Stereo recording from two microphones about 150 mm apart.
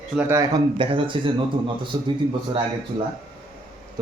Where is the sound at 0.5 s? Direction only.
35° right (ahead or behind).